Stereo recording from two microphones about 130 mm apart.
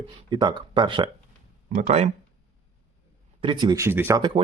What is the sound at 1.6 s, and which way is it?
Speech, 70° right (ahead or behind).